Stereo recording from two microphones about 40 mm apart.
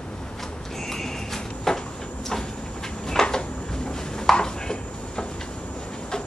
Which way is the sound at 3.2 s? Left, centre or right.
Left.